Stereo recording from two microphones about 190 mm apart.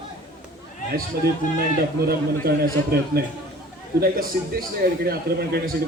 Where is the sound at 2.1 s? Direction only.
55° right (ahead or behind).